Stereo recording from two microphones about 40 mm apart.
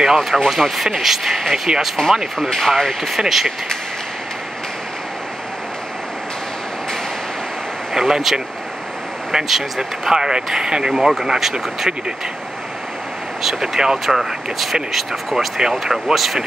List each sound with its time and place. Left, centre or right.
0.0 s speech: centre
2.0 s speech: centre
2.3 s speech: centre
3.2 s speech: centre
7.9 s speech: centre
13.4 s speech: centre